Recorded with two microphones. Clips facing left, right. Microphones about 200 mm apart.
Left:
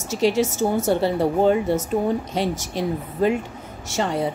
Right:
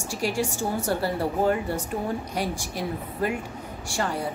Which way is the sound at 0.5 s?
20° left (ahead or behind).